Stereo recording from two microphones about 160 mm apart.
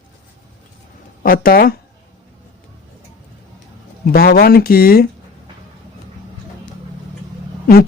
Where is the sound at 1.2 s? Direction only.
65° left (ahead or behind).